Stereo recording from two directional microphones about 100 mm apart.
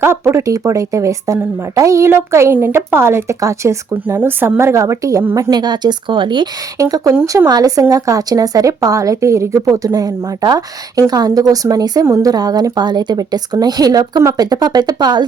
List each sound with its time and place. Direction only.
0.0 s a woman's voice: 25° right (ahead or behind)
5.5 s speech: 45° right (ahead or behind)
6.7 s a woman's voice: 35° right (ahead or behind)